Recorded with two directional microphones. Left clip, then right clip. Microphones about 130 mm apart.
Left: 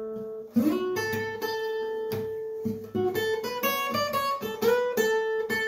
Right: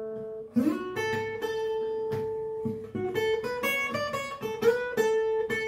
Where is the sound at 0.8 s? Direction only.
25° left (ahead or behind).